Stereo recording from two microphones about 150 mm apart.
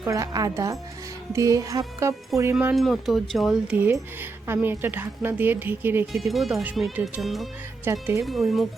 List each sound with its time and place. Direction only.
0.0 s a woman's voice: 20° right (ahead or behind)
2.7 s speech: centre (ahead or behind)
4.2 s a woman's voice: 15° right (ahead or behind)
6.1 s speech: centre (ahead or behind)
7.9 s a woman's voice: 15° right (ahead or behind)
8.2 s speech: centre (ahead or behind)